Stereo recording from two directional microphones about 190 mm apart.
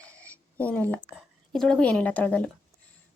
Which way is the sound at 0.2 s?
5° left (ahead or behind).